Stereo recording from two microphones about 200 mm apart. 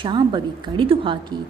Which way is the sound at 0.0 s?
20° right (ahead or behind).